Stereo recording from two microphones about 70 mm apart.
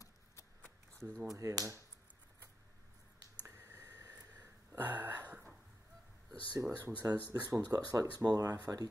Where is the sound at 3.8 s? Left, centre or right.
Right.